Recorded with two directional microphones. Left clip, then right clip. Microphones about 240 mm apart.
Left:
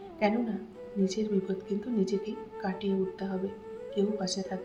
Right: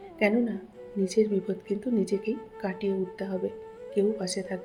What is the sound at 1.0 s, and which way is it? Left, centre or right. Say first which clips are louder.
Speech: right 6 dB; right.